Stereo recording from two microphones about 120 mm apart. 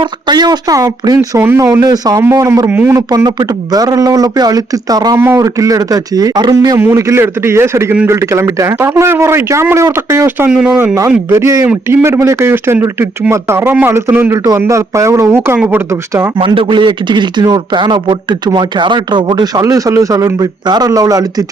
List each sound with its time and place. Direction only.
0.0 s a man's voice: 35° right (ahead or behind)
5.1 s a man's voice: 20° right (ahead or behind)
6.7 s speech: 20° right (ahead or behind)
10.5 s speech: 5° right (ahead or behind)
11.3 s speech: 25° right (ahead or behind)
15.9 s speech: 25° right (ahead or behind)
16.4 s a man's voice: 45° right (ahead or behind)
19.6 s a man's voice: 25° right (ahead or behind)